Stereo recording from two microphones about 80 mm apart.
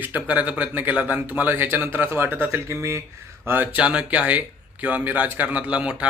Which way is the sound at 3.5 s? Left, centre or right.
Right.